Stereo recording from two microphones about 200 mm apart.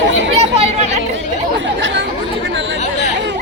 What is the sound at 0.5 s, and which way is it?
Chatter, 30° right (ahead or behind).